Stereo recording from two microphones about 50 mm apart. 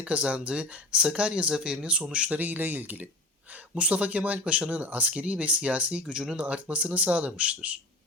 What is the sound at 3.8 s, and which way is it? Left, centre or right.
Speech, right.